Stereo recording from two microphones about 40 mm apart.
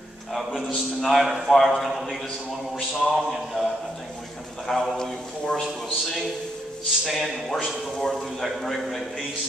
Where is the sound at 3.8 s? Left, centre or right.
Centre.